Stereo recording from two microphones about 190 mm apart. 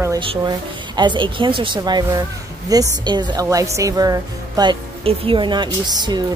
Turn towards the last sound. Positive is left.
turn(degrees=-25)  # may be behind; listen again after turning